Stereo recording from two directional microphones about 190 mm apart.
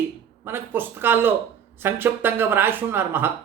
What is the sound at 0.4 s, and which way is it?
A man's voice, 10° right (ahead or behind).